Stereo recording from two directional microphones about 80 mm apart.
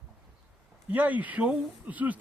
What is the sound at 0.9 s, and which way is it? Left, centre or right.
Speech, centre.